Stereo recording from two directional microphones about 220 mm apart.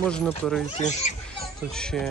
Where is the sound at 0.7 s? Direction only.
30° left (ahead or behind).